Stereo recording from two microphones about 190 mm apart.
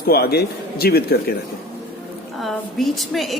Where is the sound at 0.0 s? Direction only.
55° left (ahead or behind).